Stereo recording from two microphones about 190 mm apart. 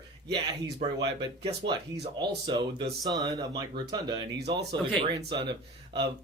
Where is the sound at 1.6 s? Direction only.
25° right (ahead or behind).